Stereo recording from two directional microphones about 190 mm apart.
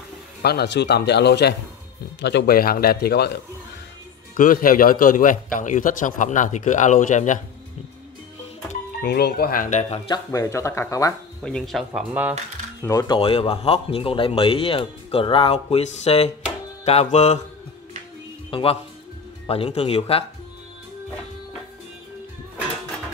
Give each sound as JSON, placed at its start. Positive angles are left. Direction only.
{"t": 0.4, "sound": "a man's voice", "side_deg": 55}
{"t": 4.4, "sound": "a man's voice", "side_deg": 45}
{"t": 9.0, "sound": "a man's voice", "side_deg": 55}
{"t": 10.0, "sound": "speech", "side_deg": 20}
{"t": 11.4, "sound": "speech", "side_deg": 0}
{"t": 12.8, "sound": "a man's voice", "side_deg": 20}
{"t": 18.5, "sound": "speech", "side_deg": 30}